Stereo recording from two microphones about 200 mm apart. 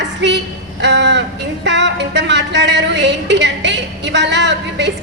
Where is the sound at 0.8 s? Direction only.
60° right (ahead or behind).